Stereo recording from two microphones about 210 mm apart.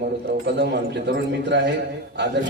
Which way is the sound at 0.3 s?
50° right (ahead or behind).